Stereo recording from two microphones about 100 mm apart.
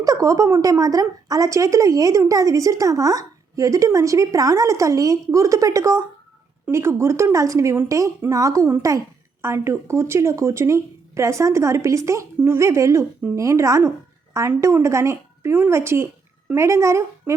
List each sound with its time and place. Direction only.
0.0 s a woman's voice: 35° right (ahead or behind)